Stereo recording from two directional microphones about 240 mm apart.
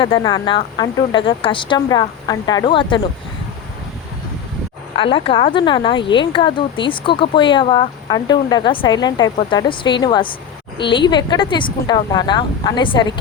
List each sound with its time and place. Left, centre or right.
0.0 s speech: centre
4.9 s speech: left